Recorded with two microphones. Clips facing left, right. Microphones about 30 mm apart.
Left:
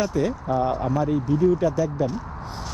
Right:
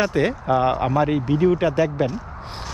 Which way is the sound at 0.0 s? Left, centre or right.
Right.